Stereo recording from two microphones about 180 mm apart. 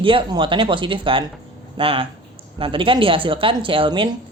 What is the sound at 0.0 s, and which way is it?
Speech, 30° right (ahead or behind).